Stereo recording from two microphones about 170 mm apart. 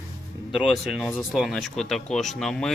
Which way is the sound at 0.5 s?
Centre (ahead or behind).